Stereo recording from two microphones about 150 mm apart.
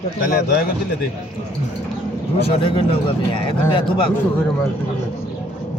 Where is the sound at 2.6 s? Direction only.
35° left (ahead or behind).